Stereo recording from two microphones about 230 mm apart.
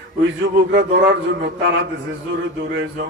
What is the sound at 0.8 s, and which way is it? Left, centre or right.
A man's voice, right.